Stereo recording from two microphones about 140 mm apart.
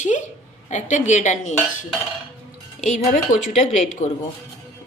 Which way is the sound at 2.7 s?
60° left (ahead or behind).